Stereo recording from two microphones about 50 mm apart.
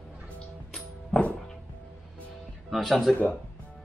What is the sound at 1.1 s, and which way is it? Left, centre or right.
Music, left.